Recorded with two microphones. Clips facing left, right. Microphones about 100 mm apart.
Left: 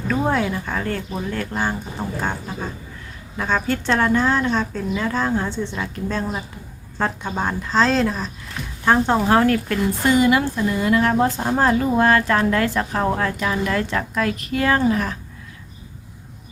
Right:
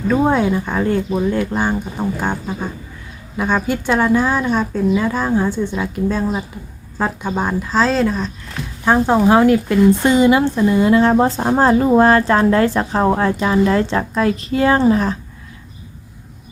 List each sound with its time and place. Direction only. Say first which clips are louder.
0.1 s a woman's voice: right 6 dB; 15° right (ahead or behind)